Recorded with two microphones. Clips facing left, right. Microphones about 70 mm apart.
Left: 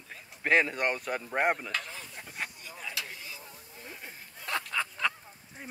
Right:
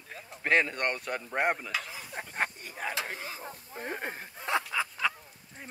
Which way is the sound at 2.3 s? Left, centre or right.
Right.